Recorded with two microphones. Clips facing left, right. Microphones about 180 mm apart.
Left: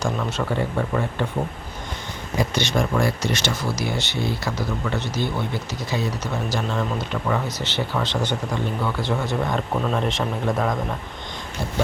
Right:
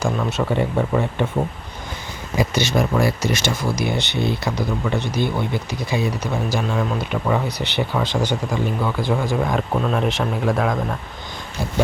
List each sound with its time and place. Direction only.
0.3 s speech: 20° right (ahead or behind)
2.4 s speech: 5° right (ahead or behind)